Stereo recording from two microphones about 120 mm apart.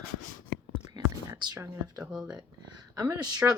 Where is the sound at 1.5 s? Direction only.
20° right (ahead or behind).